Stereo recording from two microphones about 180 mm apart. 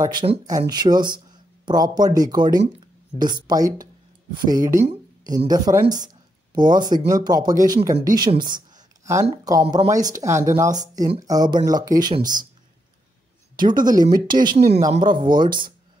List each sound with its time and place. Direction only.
0.0 s speech: 25° right (ahead or behind)
13.7 s speech: 25° right (ahead or behind)